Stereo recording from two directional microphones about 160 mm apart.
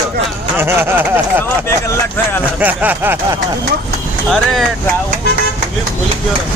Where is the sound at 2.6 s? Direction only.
10° right (ahead or behind).